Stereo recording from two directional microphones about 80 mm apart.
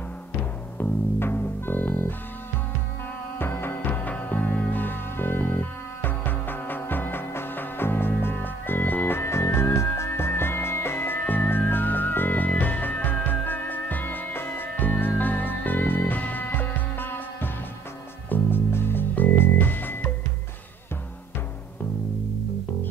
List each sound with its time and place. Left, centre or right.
0.7 s music: left
3.3 s music: left